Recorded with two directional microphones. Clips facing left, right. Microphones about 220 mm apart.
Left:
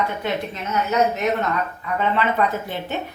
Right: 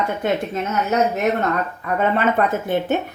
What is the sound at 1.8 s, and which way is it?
Speech, 50° right (ahead or behind).